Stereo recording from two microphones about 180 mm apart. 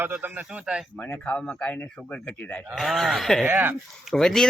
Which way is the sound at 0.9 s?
10° left (ahead or behind).